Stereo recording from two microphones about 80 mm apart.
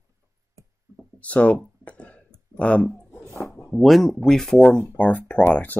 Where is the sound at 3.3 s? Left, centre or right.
Left.